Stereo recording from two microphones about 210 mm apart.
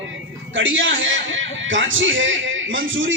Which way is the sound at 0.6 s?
65° right (ahead or behind).